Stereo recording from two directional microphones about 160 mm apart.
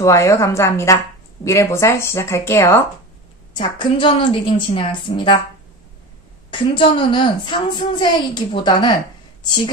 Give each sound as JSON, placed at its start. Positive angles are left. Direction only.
{"t": 0.0, "sound": "a woman's voice", "side_deg": 20}
{"t": 3.5, "sound": "a woman's voice", "side_deg": 30}
{"t": 6.5, "sound": "a woman's voice", "side_deg": 30}